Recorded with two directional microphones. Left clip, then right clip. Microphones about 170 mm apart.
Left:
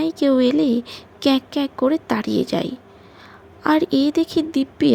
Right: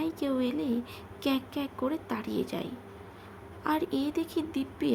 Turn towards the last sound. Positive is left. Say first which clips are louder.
# left 12 dB
turn(degrees=35)  # may be behind; listen again after turning